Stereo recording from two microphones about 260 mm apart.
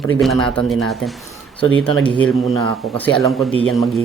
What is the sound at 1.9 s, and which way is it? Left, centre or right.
Speech, centre.